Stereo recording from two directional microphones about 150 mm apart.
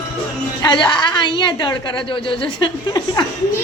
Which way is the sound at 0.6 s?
30° left (ahead or behind).